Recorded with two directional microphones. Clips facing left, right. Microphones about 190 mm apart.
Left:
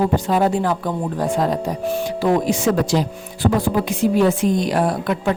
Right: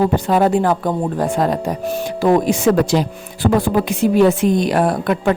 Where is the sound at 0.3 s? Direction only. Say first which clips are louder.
Right 3 dB; 60° right (ahead or behind).